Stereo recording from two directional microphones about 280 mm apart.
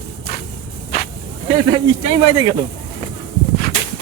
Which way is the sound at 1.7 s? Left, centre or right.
Centre.